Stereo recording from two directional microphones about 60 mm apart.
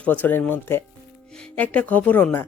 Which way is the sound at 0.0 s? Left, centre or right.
Left.